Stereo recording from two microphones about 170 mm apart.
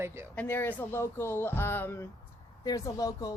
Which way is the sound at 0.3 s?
10° left (ahead or behind).